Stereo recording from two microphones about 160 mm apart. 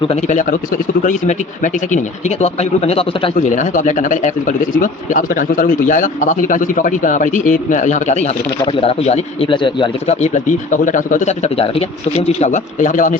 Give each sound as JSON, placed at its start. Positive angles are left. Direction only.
{"t": 0.0, "sound": "speech", "side_deg": 40}
{"t": 3.3, "sound": "speech", "side_deg": 50}
{"t": 10.1, "sound": "speech", "side_deg": 45}